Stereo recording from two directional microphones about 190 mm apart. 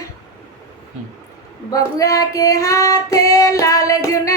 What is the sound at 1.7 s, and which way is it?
Child singing, 20° left (ahead or behind).